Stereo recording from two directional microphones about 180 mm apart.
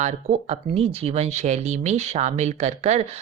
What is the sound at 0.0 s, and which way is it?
Speech, 35° right (ahead or behind).